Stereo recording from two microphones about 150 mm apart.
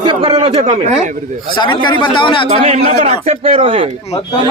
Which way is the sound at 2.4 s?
45° right (ahead or behind).